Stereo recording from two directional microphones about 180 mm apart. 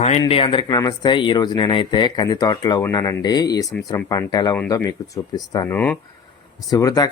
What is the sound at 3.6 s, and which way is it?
Speech, centre (ahead or behind).